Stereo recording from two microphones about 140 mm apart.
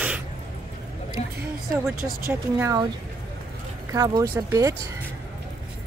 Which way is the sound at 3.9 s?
25° right (ahead or behind).